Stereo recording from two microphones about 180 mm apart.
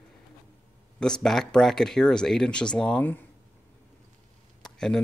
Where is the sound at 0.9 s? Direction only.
5° left (ahead or behind).